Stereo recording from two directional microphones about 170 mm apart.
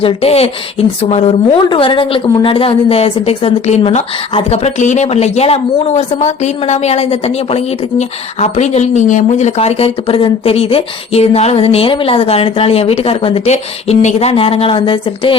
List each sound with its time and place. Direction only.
0.0 s a woman's voice: 35° left (ahead or behind)